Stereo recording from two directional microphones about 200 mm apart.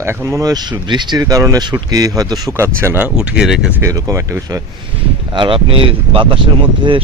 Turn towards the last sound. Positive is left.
turn(degrees=-25)  # may be behind; listen again after turning